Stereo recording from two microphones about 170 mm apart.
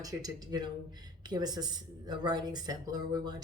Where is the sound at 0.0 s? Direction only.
20° right (ahead or behind).